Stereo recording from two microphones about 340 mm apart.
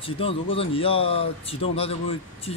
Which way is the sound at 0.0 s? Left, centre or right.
Centre.